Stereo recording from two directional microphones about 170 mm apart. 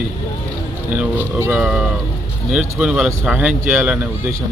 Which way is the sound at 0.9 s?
15° right (ahead or behind).